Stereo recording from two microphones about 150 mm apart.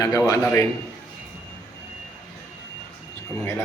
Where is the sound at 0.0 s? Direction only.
25° left (ahead or behind).